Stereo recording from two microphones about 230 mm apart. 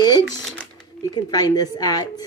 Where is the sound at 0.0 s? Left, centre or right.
Centre.